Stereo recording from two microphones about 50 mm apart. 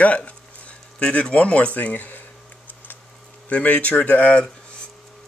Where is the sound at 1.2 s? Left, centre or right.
Left.